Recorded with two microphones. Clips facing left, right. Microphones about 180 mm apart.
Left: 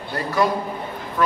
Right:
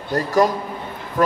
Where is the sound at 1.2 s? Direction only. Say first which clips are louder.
Right 3 dB; 45° right (ahead or behind).